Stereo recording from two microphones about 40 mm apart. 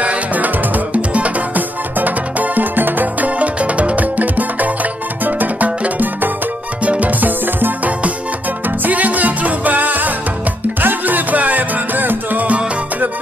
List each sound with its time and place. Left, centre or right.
0.0 s music: right
3.3 s music: right